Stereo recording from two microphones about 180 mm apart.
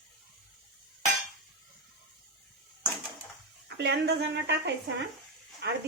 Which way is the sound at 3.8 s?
65° right (ahead or behind).